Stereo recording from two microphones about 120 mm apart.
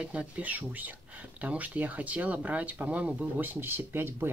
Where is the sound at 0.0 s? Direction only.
10° right (ahead or behind).